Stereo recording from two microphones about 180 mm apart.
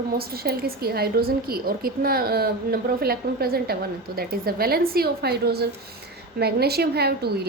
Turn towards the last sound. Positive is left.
turn(degrees=-60)  # may be behind; listen again after turning